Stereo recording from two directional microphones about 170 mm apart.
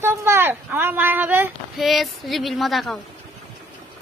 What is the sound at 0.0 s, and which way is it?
Speech, 15° right (ahead or behind).